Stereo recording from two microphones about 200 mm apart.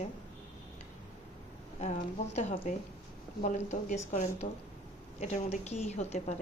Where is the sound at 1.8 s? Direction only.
35° left (ahead or behind).